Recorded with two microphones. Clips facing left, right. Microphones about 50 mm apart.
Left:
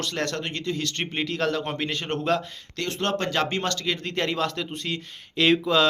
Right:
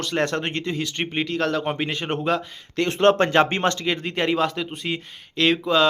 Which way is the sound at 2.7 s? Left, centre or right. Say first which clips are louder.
Right 9 dB; right.